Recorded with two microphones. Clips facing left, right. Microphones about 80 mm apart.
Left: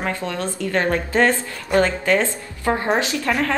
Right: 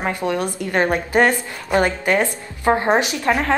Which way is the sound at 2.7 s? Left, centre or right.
Right.